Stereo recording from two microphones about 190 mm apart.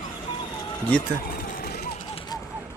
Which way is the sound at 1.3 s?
50° left (ahead or behind).